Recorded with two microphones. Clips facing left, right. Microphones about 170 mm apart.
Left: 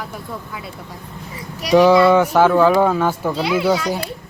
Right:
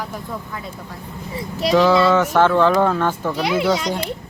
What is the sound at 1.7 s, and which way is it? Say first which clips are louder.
Speech: left 3 dB; 15° left (ahead or behind).